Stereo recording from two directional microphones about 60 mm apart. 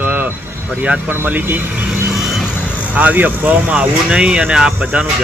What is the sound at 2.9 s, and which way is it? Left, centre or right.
Speech, right.